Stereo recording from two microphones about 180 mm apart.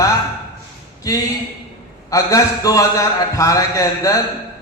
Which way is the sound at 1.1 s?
20° left (ahead or behind).